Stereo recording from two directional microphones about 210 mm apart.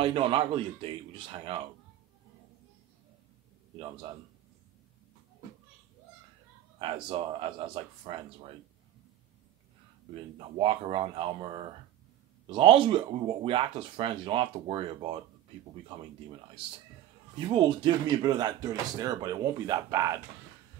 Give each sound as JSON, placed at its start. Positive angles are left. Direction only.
{"t": 0.0, "sound": "speech", "side_deg": -25}
{"t": 7.1, "sound": "speech", "side_deg": -25}
{"t": 10.6, "sound": "speech", "side_deg": -25}
{"t": 16.6, "sound": "speech", "side_deg": -25}